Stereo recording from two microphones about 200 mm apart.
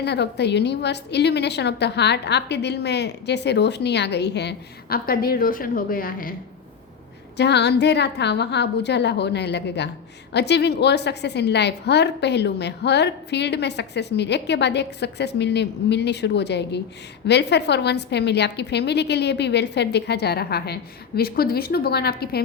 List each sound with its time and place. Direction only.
0.0 s a woman's voice: 55° left (ahead or behind)
7.3 s a woman's voice: 55° left (ahead or behind)